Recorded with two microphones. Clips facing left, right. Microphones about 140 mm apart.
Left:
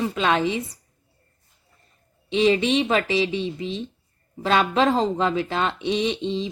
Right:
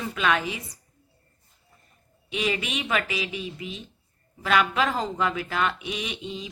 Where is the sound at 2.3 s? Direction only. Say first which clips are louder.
Left 9 dB; 30° left (ahead or behind).